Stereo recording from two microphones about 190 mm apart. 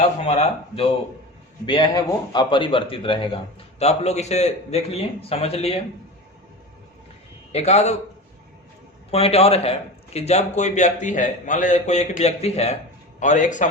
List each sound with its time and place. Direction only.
0.3 s a man's voice: 35° left (ahead or behind)
1.6 s a man's voice: 20° left (ahead or behind)
7.5 s a man's voice: 35° left (ahead or behind)
9.0 s a man's voice: 30° left (ahead or behind)